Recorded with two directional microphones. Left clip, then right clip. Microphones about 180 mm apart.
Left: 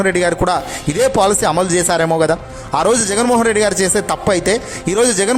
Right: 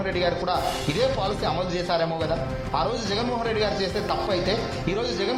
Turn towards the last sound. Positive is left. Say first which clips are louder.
# left 12 dB
turn(degrees=50)  # may be behind; listen again after turning